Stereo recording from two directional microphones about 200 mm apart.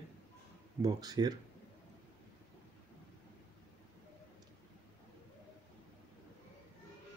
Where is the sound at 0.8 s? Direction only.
20° right (ahead or behind).